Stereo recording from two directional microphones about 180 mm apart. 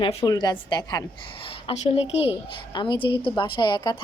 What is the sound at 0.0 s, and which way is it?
A woman's voice, 30° left (ahead or behind).